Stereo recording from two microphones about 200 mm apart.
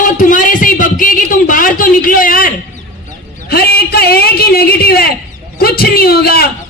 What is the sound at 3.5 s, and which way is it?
A man's voice, 50° left (ahead or behind).